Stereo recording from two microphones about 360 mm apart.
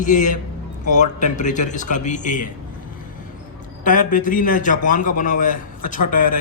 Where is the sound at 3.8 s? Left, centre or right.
Left.